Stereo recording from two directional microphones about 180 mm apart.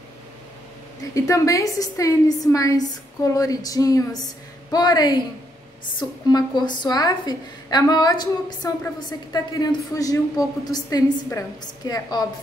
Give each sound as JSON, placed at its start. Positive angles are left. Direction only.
{"t": 1.1, "sound": "a woman's voice", "side_deg": 15}